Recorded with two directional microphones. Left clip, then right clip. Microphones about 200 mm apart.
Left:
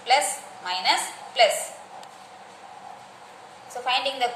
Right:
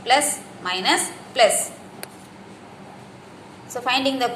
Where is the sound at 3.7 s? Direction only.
20° right (ahead or behind).